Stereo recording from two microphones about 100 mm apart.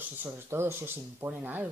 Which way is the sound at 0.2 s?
25° right (ahead or behind).